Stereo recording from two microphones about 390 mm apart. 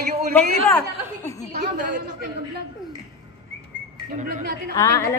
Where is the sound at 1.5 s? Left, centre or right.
Right.